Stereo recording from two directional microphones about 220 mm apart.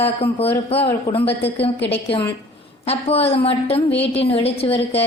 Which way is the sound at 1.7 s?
50° left (ahead or behind).